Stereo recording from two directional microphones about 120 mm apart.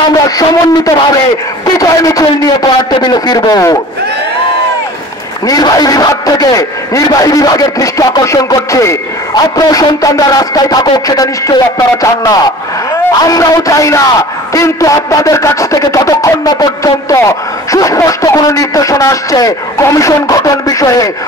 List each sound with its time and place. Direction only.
0.1 s a man's voice: 30° left (ahead or behind)
5.5 s a man's voice: 30° left (ahead or behind)